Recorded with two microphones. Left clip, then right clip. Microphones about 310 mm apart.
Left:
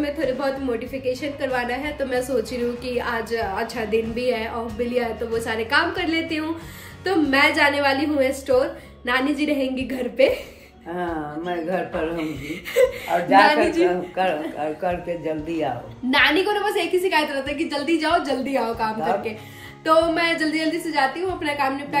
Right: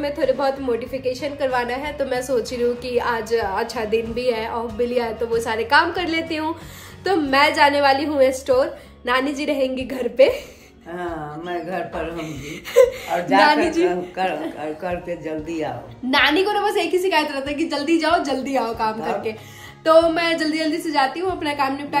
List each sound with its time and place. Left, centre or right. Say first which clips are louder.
0.0 s a woman's voice: right 3 dB; centre
12.7 s a woman's voice: right 4 dB; centre
13.1 s a man's voice: left 1 dB; centre
13.5 s a woman's voice: right 1 dB; centre
13.8 s a man's voice: even; centre
16.1 s a woman's voice: right 1 dB; centre